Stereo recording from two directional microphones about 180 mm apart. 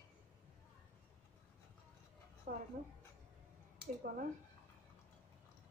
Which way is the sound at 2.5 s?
55° right (ahead or behind).